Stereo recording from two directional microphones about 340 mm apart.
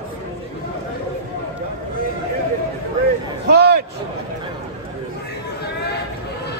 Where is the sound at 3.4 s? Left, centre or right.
Right.